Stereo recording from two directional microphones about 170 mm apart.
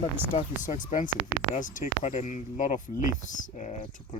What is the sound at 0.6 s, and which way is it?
Speech, 50° left (ahead or behind).